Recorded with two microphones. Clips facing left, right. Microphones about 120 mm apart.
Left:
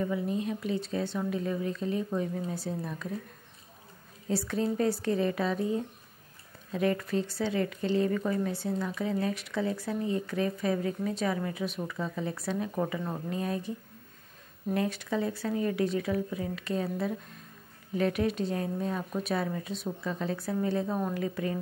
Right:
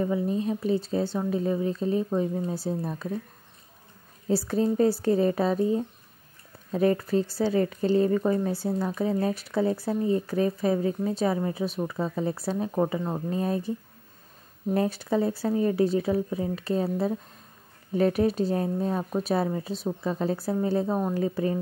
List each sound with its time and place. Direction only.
0.0 s speech: 30° right (ahead or behind)
4.3 s speech: 35° right (ahead or behind)